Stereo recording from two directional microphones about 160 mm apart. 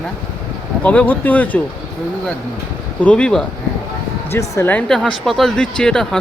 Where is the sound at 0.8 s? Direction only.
10° left (ahead or behind).